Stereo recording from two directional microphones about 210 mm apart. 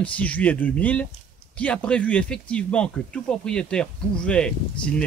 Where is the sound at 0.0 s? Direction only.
5° left (ahead or behind).